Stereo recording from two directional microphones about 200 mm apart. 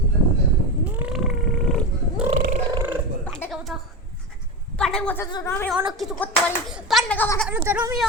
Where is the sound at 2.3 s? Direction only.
40° right (ahead or behind).